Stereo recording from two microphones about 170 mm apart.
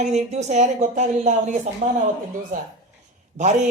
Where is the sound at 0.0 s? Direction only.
40° right (ahead or behind).